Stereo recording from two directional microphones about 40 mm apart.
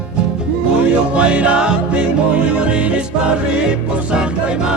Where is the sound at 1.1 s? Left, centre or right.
Right.